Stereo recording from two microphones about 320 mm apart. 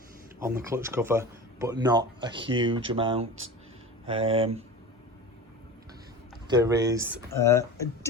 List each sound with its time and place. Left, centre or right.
0.3 s speech: centre
6.5 s speech: centre
7.3 s speech: centre